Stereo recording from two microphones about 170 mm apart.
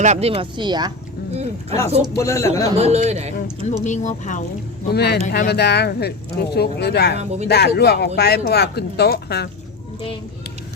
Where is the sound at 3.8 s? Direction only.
45° left (ahead or behind).